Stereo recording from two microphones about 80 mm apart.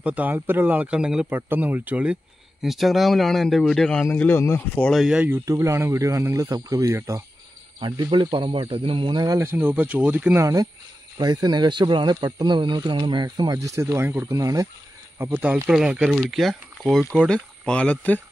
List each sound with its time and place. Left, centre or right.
0.0 s speech: centre
1.3 s speech: right
2.6 s speech: centre
4.1 s speech: left
4.9 s speech: centre
5.4 s speech: right
7.8 s speech: right
9.4 s speech: right
10.4 s speech: right
11.1 s speech: right
13.6 s speech: right
14.3 s speech: right
15.1 s speech: right; by 17.0 s centre
17.3 s speech: centre